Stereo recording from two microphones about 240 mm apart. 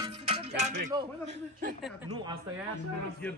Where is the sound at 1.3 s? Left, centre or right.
Right.